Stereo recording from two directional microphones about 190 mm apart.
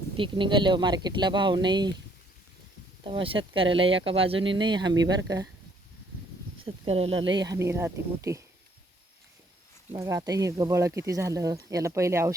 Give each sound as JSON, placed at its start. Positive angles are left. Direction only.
{"t": 0.2, "sound": "speech", "side_deg": -25}
{"t": 3.0, "sound": "speech", "side_deg": -25}
{"t": 6.7, "sound": "speech", "side_deg": -30}
{"t": 9.9, "sound": "speech", "side_deg": -15}